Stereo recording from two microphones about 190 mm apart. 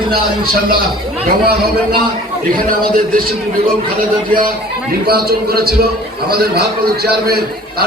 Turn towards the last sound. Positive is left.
turn(degrees=-55)  # may be behind; listen again after turning